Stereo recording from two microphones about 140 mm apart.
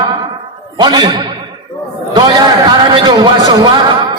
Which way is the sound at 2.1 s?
35° right (ahead or behind).